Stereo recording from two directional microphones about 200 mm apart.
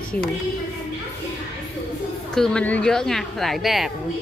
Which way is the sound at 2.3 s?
5° left (ahead or behind).